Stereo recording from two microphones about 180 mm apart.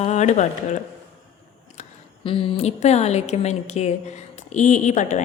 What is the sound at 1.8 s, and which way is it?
A woman's voice, 30° left (ahead or behind).